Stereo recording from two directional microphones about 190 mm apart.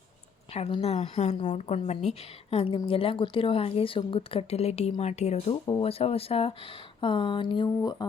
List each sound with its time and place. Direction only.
0.5 s a woman's voice: 35° left (ahead or behind)